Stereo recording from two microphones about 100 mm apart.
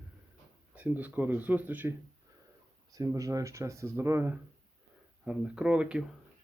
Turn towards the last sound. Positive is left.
turn(degrees=-10)  # may be behind; listen again after turning